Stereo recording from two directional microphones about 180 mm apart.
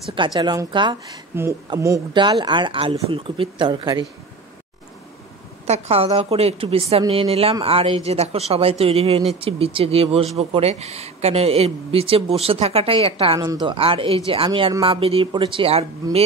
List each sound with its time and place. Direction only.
0.1 s a man's voice: 25° right (ahead or behind)
1.3 s a man's voice: 15° right (ahead or behind)
5.7 s speech: 35° right (ahead or behind)